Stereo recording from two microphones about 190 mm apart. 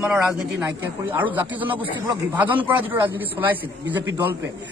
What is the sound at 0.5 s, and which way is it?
A man's voice, 10° right (ahead or behind).